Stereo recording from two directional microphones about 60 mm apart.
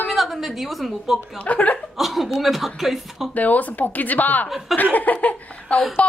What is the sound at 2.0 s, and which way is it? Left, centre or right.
Speech, centre.